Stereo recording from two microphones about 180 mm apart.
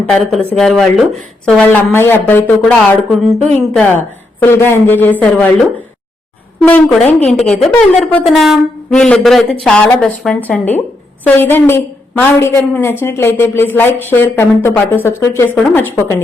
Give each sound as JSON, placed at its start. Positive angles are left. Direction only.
{"t": 0.1, "sound": "speech", "side_deg": 0}
{"t": 3.8, "sound": "a woman's voice", "side_deg": 10}
{"t": 6.7, "sound": "a woman's voice", "side_deg": 5}